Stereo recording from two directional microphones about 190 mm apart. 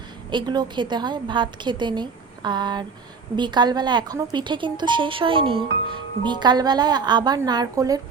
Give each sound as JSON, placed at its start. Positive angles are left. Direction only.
{"t": 0.3, "sound": "speech", "side_deg": -25}